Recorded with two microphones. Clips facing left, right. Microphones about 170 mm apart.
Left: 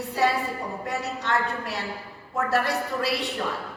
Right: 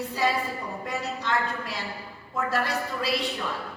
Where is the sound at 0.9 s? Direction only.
70° left (ahead or behind).